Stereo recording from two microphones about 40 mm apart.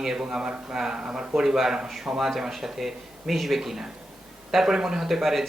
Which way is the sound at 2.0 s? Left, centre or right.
Centre.